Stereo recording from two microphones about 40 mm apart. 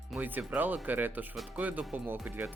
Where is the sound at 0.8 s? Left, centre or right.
Right.